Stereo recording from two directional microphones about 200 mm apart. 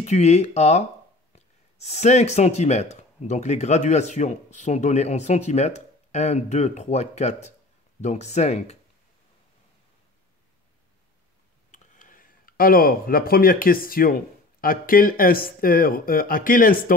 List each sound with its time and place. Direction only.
0.0 s speech: 35° left (ahead or behind)
11.7 s speech: 40° left (ahead or behind)